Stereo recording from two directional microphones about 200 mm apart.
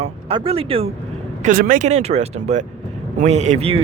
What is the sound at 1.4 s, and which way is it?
Speech, 40° right (ahead or behind).